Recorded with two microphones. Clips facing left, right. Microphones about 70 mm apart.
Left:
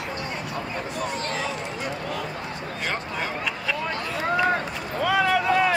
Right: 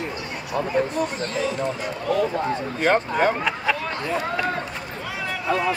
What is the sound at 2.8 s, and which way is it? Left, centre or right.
Speech, right.